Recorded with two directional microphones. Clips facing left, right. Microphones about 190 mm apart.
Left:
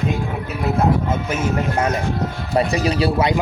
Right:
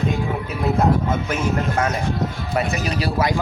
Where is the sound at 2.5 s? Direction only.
30° left (ahead or behind).